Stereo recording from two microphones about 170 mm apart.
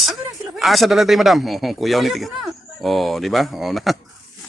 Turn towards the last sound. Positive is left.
turn(degrees=0)  # may be behind; listen again after turning